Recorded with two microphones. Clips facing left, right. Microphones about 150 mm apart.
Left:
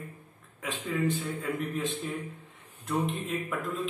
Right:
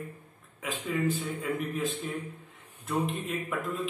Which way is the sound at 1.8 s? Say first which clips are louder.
Even; centre (ahead or behind).